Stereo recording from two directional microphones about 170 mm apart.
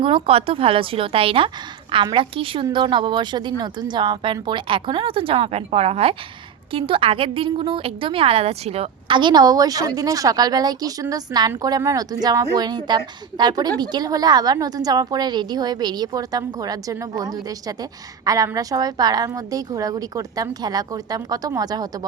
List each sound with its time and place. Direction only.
0.0 s a woman's voice: 35° right (ahead or behind)